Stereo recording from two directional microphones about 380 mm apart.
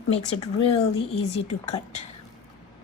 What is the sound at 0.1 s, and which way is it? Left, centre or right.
Speech, centre.